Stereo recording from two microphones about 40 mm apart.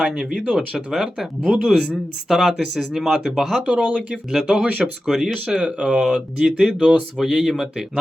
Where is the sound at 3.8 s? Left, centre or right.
Right.